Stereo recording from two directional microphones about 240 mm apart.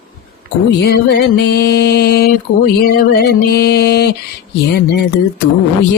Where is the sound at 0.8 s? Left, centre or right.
Left.